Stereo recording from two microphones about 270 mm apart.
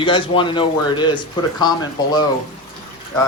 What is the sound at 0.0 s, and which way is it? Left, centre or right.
Speech, centre.